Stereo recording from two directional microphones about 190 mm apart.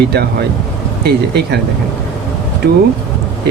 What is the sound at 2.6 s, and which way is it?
Speech, 60° right (ahead or behind).